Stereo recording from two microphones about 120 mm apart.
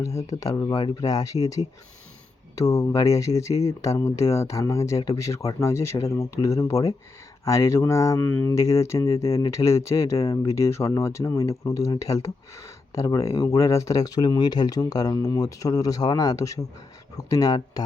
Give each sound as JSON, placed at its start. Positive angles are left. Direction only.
{"t": 0.2, "sound": "speech", "side_deg": 30}